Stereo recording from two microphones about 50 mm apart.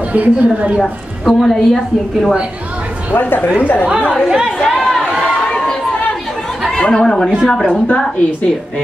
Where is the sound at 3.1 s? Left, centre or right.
Left.